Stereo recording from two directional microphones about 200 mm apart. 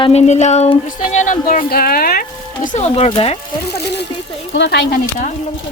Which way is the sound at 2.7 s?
30° left (ahead or behind).